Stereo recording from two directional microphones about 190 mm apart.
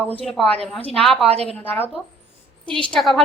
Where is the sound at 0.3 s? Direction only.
5° left (ahead or behind).